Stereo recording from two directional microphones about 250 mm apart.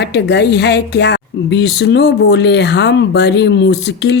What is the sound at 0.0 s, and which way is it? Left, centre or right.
Speech, left.